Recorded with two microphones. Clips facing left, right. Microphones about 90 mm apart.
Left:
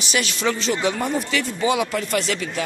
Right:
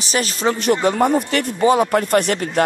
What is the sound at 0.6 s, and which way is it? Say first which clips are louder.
A man's voice: right 6 dB; 50° right (ahead or behind).